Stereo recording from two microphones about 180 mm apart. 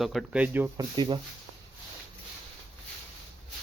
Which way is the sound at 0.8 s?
25° right (ahead or behind).